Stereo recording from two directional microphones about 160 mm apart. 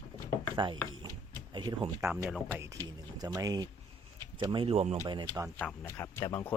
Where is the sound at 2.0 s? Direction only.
15° right (ahead or behind).